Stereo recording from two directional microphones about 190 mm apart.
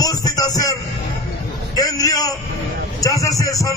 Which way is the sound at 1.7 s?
20° left (ahead or behind).